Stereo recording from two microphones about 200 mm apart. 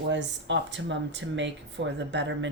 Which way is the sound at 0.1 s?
65° right (ahead or behind).